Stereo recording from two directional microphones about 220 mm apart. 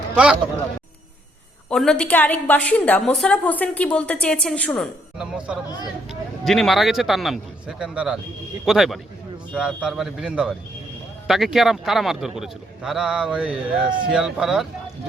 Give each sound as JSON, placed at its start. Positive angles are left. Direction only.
{"t": 1.7, "sound": "a woman's voice", "side_deg": 0}
{"t": 5.6, "sound": "speech", "side_deg": 20}
{"t": 6.1, "sound": "a woman's voice", "side_deg": 0}